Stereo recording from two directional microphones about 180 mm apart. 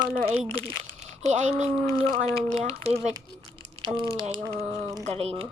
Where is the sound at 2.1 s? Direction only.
25° right (ahead or behind).